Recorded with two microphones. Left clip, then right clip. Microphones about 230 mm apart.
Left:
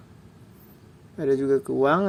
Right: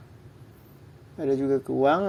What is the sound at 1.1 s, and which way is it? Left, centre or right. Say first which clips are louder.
Speech: left 3 dB; left.